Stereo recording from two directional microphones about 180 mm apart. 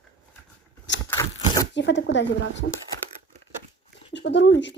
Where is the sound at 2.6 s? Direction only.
90° left.